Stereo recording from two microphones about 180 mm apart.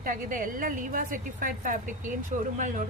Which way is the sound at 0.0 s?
45° right (ahead or behind).